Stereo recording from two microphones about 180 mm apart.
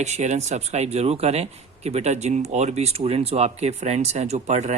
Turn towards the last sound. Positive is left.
turn(degrees=-40)  # may be behind; listen again after turning